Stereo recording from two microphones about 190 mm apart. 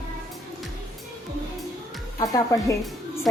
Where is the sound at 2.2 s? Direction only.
15° left (ahead or behind).